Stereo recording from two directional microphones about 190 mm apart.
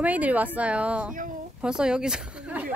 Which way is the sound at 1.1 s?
45° right (ahead or behind).